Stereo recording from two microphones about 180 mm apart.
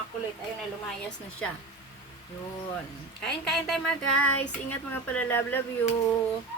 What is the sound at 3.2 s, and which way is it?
A woman's voice, centre (ahead or behind).